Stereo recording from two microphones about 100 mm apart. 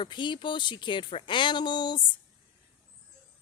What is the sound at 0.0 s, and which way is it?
A woman's voice, 55° left (ahead or behind).